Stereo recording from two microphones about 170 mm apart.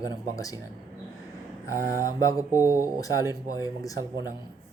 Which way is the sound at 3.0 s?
20° left (ahead or behind).